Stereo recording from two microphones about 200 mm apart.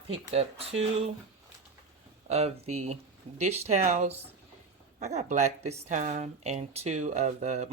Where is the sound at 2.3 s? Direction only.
30° right (ahead or behind).